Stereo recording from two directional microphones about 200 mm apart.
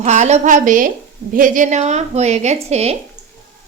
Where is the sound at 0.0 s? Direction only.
35° right (ahead or behind).